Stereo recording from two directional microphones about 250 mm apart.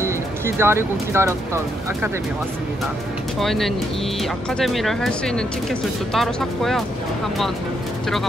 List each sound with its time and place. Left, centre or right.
0.6 s speech: centre
3.3 s speech: centre